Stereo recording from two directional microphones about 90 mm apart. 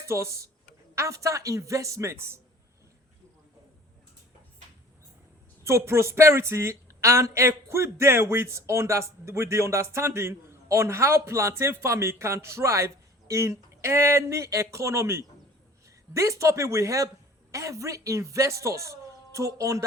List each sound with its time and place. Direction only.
0.0 s a woman's voice: 30° right (ahead or behind)
5.6 s a woman's voice: 30° right (ahead or behind)